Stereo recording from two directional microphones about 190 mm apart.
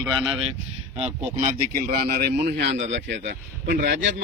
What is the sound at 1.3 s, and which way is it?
Speech, 45° right (ahead or behind).